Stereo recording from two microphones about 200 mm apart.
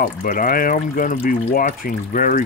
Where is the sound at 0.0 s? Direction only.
40° left (ahead or behind).